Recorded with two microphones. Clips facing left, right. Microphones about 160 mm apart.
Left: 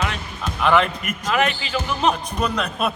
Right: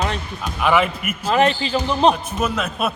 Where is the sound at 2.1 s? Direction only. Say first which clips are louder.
Right 1 dB; 5° right (ahead or behind).